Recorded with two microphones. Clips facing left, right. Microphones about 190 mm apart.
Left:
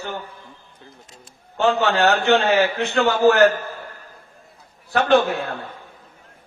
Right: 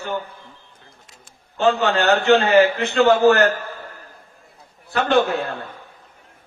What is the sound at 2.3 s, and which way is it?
A man's voice, 60° right (ahead or behind).